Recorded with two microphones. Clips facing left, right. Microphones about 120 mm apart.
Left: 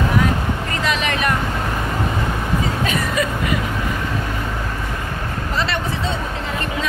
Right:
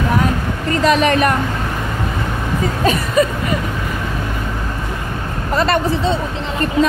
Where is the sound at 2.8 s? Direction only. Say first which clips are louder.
Right 6 dB; 35° right (ahead or behind).